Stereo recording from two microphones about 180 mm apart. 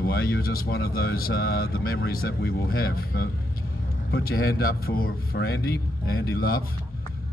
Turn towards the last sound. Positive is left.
turn(degrees=60)  # may be behind; listen again after turning